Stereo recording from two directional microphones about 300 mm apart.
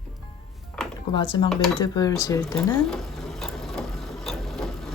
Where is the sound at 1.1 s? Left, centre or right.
Centre.